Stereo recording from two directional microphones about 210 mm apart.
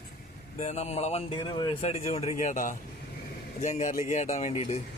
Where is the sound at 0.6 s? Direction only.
30° left (ahead or behind).